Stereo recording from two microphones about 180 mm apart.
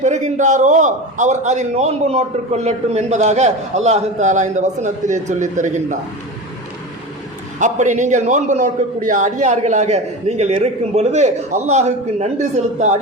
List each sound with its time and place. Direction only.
0.0 s a man's voice: 40° right (ahead or behind)
7.6 s a man's voice: 40° right (ahead or behind)